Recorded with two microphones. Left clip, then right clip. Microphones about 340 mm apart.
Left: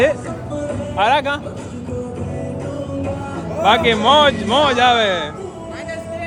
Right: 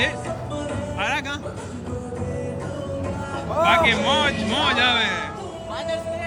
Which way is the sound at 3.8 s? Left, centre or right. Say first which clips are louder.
Left 7 dB; centre.